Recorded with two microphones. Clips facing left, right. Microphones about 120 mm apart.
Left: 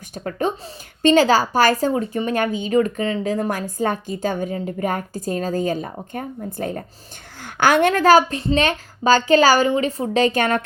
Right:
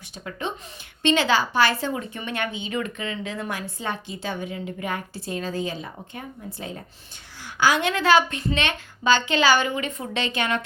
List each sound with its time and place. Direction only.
0.1 s a woman's voice: 45° left (ahead or behind)